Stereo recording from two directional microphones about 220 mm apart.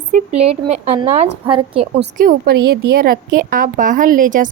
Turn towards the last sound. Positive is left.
turn(degrees=-35)  # may be behind; listen again after turning